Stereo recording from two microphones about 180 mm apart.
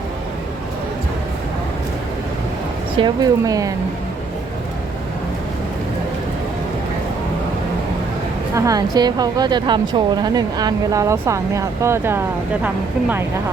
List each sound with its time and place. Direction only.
3.0 s a woman's voice: 20° right (ahead or behind)
8.5 s a woman's voice: 20° right (ahead or behind)